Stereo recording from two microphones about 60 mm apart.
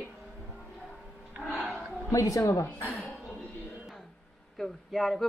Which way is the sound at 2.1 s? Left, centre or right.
Left.